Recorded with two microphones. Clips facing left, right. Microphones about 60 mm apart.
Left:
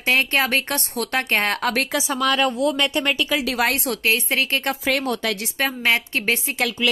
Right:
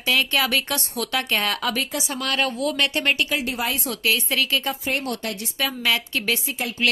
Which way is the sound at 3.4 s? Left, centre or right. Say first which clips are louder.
Left 5 dB; left.